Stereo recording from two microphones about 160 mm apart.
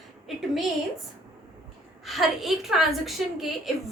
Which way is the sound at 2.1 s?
Centre (ahead or behind).